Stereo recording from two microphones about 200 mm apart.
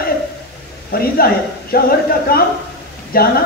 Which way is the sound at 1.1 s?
50° left (ahead or behind).